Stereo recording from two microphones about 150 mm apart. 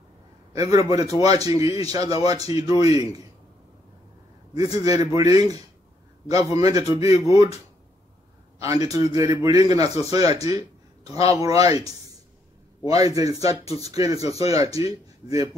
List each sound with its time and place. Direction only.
0.5 s a man's voice: 20° right (ahead or behind)
4.7 s a man's voice: 25° right (ahead or behind)
8.5 s a man's voice: 25° right (ahead or behind)